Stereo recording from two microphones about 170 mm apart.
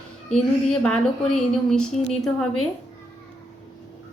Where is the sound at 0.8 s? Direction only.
5° left (ahead or behind).